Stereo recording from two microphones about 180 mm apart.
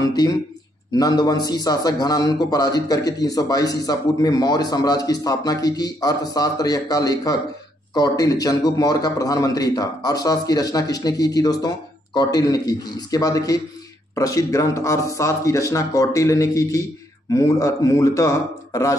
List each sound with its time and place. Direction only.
0.9 s a man's voice: 20° left (ahead or behind)